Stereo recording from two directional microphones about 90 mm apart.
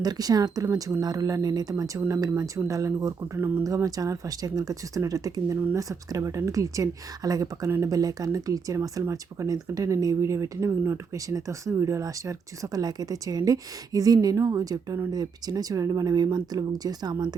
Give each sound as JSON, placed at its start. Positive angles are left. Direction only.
{"t": 0.0, "sound": "speech", "side_deg": -45}